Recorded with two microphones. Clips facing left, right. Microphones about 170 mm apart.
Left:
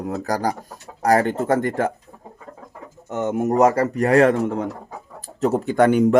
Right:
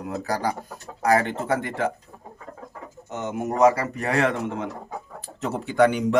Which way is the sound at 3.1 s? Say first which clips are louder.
Left 7 dB; 45° left (ahead or behind).